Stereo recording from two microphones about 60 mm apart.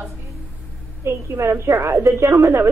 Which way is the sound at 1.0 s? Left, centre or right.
Right.